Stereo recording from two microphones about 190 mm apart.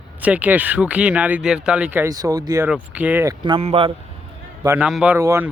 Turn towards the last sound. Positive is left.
turn(degrees=-15)  # may be behind; listen again after turning